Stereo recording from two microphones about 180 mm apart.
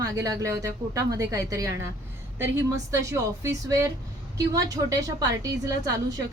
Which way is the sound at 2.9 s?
15° right (ahead or behind).